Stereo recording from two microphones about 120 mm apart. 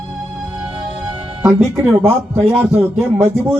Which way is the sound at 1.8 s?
20° right (ahead or behind).